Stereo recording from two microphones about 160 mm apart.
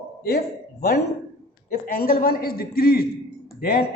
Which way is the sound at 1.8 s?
65° left (ahead or behind).